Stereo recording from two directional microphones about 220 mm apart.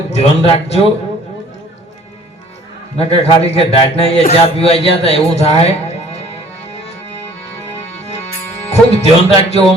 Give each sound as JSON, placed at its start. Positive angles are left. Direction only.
{"t": 0.1, "sound": "a man's voice", "side_deg": 30}
{"t": 3.0, "sound": "a man's voice", "side_deg": 25}
{"t": 5.5, "sound": "music", "side_deg": 30}
{"t": 7.8, "sound": "music", "side_deg": 30}
{"t": 8.9, "sound": "a man's voice", "side_deg": 25}